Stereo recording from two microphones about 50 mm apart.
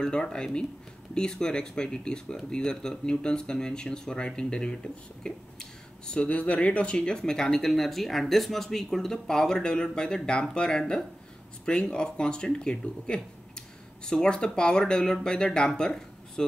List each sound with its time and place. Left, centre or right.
0.0 s speech: centre